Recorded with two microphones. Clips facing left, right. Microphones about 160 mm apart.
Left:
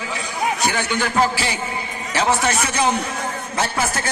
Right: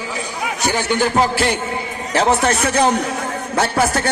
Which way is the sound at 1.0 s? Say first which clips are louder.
Right 3 dB; 55° right (ahead or behind).